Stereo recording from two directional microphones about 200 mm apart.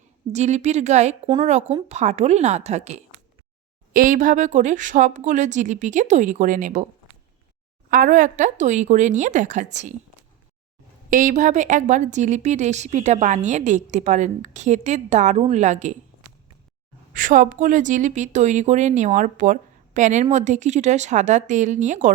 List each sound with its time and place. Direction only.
0.3 s a woman's voice: 35° right (ahead or behind)
3.9 s a woman's voice: 45° right (ahead or behind)
7.9 s a woman's voice: 45° right (ahead or behind)
11.1 s a woman's voice: 40° right (ahead or behind)
17.2 s a woman's voice: 40° right (ahead or behind)